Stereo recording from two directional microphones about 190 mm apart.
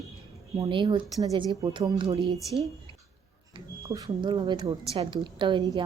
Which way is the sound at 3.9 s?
20° right (ahead or behind).